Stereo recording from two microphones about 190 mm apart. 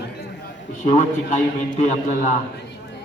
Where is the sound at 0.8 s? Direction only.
40° left (ahead or behind).